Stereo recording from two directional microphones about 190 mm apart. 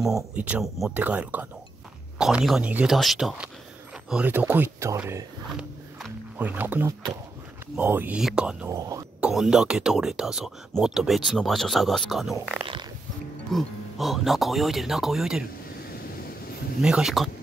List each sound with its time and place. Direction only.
0.0 s speech: 5° right (ahead or behind)
5.5 s a sound: 5° right (ahead or behind)
7.7 s speech: 10° right (ahead or behind)
8.6 s speech: 15° right (ahead or behind)
9.2 s speech: 5° right (ahead or behind)
16.8 s speech: 5° right (ahead or behind)